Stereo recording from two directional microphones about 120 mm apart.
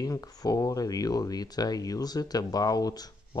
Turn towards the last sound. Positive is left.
turn(degrees=30)  # may be behind; listen again after turning